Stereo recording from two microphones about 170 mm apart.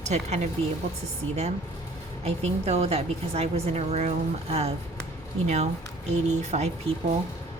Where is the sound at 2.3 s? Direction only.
40° right (ahead or behind).